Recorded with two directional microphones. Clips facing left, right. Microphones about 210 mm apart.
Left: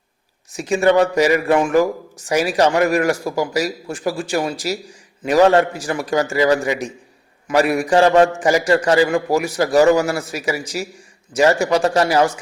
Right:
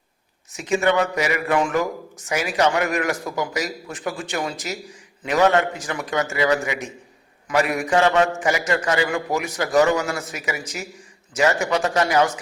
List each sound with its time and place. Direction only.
0.5 s a man's voice: 30° left (ahead or behind)